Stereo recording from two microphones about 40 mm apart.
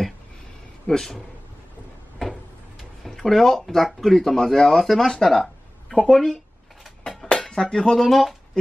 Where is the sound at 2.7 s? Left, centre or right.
Centre.